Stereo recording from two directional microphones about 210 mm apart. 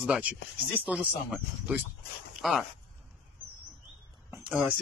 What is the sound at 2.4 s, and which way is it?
Speech, centre (ahead or behind).